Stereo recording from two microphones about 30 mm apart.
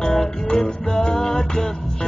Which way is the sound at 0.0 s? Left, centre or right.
Left.